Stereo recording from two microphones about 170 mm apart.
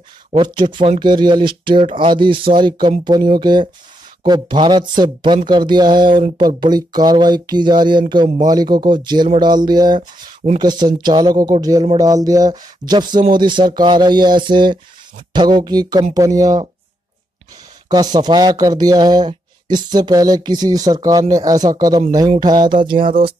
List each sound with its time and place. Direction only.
0.4 s speech: 30° right (ahead or behind)
17.8 s speech: 25° right (ahead or behind)